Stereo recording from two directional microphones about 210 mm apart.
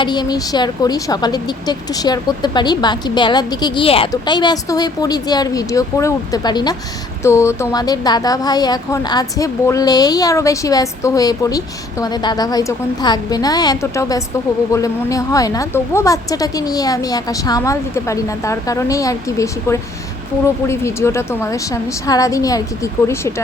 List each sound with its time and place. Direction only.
0.0 s speech: 20° left (ahead or behind)